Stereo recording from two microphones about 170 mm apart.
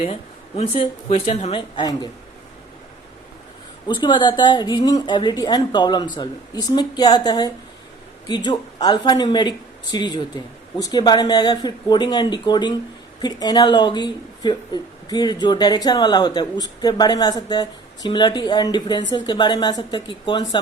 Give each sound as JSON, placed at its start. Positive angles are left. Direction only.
{"t": 0.0, "sound": "speech", "side_deg": 35}
{"t": 3.8, "sound": "speech", "side_deg": 30}